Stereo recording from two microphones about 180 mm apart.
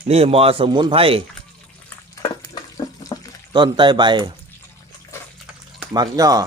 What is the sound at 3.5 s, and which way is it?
Speech, 25° right (ahead or behind).